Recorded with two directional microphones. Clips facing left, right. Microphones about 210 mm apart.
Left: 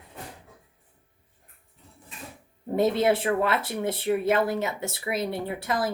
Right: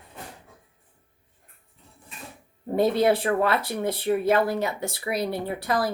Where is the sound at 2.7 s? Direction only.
25° left (ahead or behind).